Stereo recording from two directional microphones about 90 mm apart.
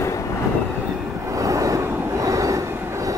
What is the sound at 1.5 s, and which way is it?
Vehicle, 35° right (ahead or behind).